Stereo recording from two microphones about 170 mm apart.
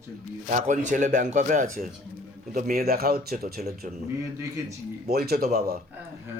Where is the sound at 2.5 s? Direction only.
65° right (ahead or behind).